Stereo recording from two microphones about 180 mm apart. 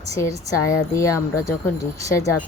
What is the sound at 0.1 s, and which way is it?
Speech, 15° left (ahead or behind).